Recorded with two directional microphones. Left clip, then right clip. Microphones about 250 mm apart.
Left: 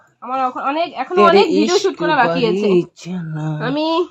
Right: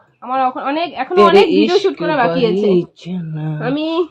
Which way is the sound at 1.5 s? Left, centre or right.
Left.